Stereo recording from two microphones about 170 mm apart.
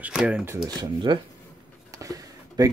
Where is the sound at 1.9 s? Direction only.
20° right (ahead or behind).